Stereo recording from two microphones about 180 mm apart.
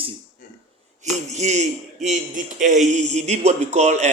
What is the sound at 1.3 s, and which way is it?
A man's voice, 40° right (ahead or behind).